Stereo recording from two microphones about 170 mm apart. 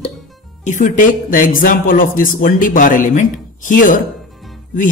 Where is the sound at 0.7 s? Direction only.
50° left (ahead or behind).